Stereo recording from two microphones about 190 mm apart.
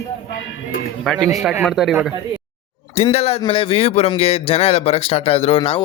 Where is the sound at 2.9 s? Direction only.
35° left (ahead or behind).